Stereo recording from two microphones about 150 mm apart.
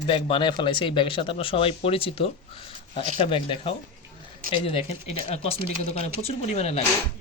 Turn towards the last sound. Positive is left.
turn(degrees=45)  # may be behind; listen again after turning